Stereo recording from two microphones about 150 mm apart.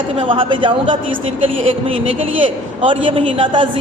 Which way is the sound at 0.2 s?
35° right (ahead or behind).